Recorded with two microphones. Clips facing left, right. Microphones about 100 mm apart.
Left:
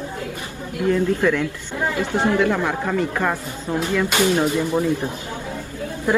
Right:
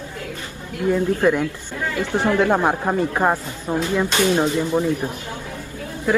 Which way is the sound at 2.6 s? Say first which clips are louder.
Right 2 dB; 30° right (ahead or behind).